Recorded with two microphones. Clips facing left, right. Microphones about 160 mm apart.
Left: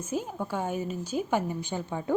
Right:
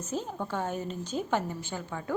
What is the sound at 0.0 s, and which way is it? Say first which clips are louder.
A woman's voice: left 2 dB; 10° left (ahead or behind).